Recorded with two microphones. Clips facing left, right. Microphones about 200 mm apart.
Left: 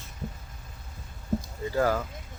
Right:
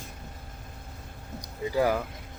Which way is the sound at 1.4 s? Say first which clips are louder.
Right 3 dB; 15° right (ahead or behind).